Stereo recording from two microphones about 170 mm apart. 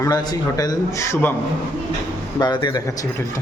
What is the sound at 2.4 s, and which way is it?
Speech, 25° left (ahead or behind).